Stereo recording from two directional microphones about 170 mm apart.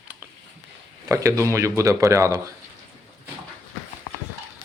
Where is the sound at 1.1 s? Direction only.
20° right (ahead or behind).